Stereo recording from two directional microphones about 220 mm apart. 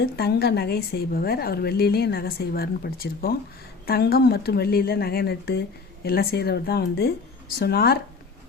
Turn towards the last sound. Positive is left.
turn(degrees=45)  # may be behind; listen again after turning